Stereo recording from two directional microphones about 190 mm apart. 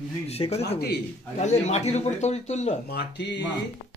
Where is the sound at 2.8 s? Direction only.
60° left (ahead or behind).